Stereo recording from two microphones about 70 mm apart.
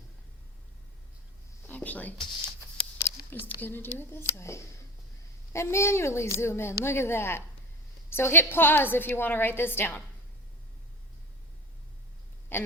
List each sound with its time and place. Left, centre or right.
1.6 s a sound: left
3.2 s a woman's voice: left
12.5 s speech: left